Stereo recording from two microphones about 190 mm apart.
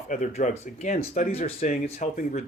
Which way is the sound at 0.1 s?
40° left (ahead or behind).